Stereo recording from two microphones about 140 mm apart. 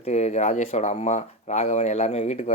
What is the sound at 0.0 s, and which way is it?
Speech, 55° left (ahead or behind).